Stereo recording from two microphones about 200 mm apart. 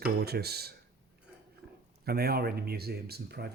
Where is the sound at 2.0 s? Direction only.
50° right (ahead or behind).